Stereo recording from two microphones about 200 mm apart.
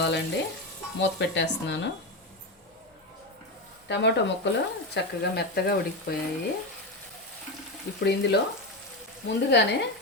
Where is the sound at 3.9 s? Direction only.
60° left (ahead or behind).